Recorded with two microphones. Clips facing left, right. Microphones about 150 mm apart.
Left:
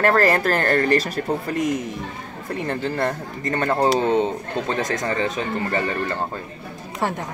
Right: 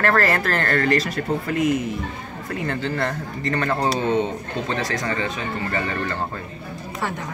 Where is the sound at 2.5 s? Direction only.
30° left (ahead or behind).